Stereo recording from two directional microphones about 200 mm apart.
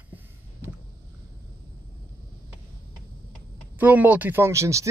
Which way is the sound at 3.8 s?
10° right (ahead or behind).